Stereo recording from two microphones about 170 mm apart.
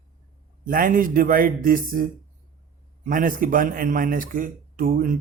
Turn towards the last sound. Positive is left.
turn(degrees=-55)  # may be behind; listen again after turning